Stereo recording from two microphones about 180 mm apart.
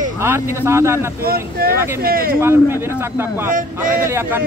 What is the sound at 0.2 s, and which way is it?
Speech, 15° right (ahead or behind).